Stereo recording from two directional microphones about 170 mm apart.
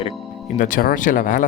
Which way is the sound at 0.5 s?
50° left (ahead or behind).